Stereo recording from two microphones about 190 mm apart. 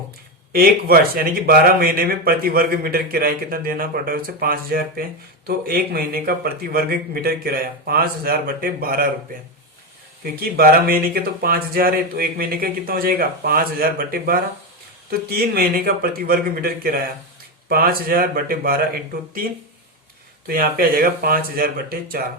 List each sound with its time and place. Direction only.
0.5 s speech: 50° right (ahead or behind)
10.4 s speech: 50° right (ahead or behind)
20.5 s speech: 50° right (ahead or behind)